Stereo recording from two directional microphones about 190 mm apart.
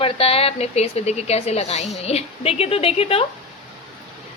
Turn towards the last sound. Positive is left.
turn(degrees=30)  # may be behind; listen again after turning